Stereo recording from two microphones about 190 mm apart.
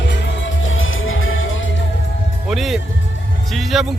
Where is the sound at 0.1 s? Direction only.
85° left.